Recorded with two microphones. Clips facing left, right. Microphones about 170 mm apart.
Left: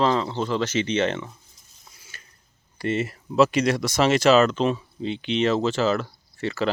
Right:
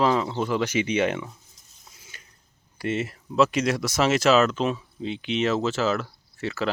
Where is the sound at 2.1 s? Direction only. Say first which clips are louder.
Left 3 dB; 15° right (ahead or behind).